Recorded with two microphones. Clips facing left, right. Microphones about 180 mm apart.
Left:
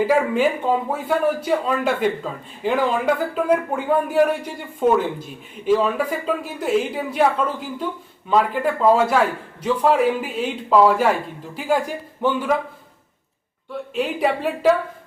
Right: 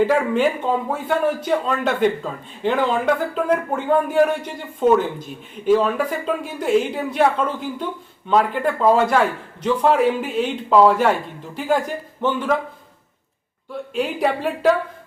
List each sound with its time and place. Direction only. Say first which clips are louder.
0.1 s a man's voice: even; 5° left (ahead or behind)
13.9 s a man's voice: even; centre (ahead or behind)